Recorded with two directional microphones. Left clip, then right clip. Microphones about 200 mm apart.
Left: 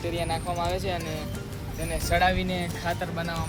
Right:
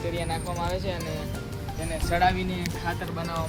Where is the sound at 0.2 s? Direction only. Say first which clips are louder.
Left 2 dB; 50° left (ahead or behind).